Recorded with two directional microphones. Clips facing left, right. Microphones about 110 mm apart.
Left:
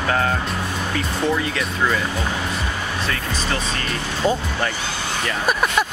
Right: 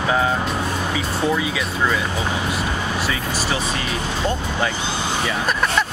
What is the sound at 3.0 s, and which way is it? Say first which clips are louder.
Speech: right 1 dB; 10° right (ahead or behind).